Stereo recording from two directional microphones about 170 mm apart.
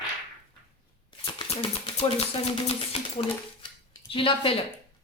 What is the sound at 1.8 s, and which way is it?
Speech, 35° left (ahead or behind).